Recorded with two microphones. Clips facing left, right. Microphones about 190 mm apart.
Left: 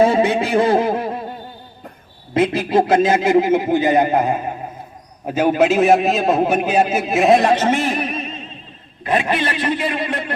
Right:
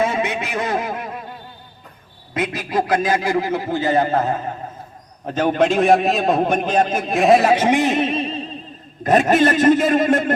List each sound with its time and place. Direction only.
0.0 s a man's voice: 30° left (ahead or behind)
2.3 s a man's voice: 30° left (ahead or behind); by 10.3 s 45° right (ahead or behind)